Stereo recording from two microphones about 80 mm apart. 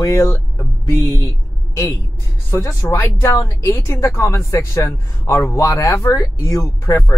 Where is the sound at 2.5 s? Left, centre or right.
Left.